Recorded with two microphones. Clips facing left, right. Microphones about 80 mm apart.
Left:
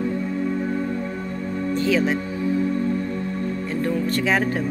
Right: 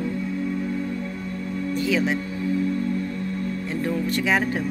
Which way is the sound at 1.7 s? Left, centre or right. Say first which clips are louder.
Left 2 dB; centre.